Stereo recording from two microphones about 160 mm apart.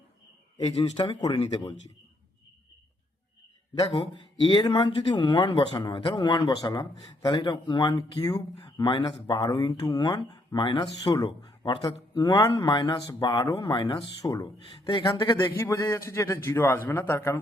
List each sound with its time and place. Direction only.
0.6 s speech: 30° left (ahead or behind)
3.8 s speech: 35° left (ahead or behind)
11.3 s a man's voice: 35° left (ahead or behind); by 17.4 s 15° left (ahead or behind)